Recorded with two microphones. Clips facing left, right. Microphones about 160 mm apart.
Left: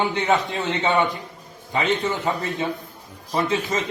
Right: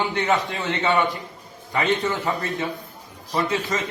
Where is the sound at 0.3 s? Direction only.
25° left (ahead or behind).